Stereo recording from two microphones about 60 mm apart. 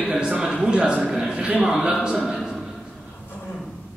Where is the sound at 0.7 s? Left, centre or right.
Centre.